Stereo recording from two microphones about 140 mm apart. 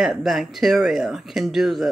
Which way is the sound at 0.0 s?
Centre (ahead or behind).